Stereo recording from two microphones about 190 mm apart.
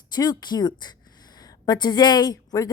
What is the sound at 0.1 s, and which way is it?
A woman's voice, 20° left (ahead or behind).